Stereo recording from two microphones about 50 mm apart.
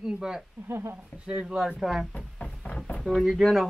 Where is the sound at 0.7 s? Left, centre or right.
Right.